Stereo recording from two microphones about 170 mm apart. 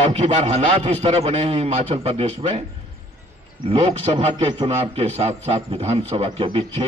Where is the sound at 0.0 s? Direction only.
35° right (ahead or behind).